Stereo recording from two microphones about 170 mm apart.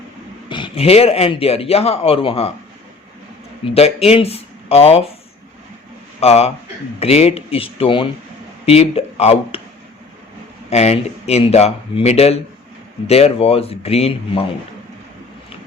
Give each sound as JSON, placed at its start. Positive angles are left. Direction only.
{"t": 0.4, "sound": "a man's voice", "side_deg": 30}
{"t": 3.8, "sound": "a man's voice", "side_deg": 35}
{"t": 6.1, "sound": "a man's voice", "side_deg": 35}
{"t": 10.7, "sound": "a man's voice", "side_deg": 40}